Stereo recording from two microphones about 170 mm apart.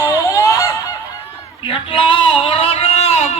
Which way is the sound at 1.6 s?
30° left (ahead or behind).